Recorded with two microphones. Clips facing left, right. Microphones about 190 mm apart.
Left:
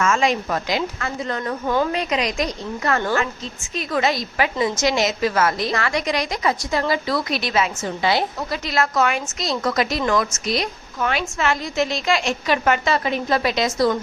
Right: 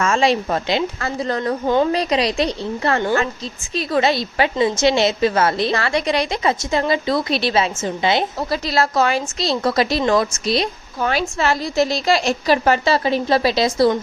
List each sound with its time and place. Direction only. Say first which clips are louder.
0.0 s a woman's voice: right 2 dB; 30° right (ahead or behind)
8.4 s a woman's voice: right 3 dB; 35° right (ahead or behind)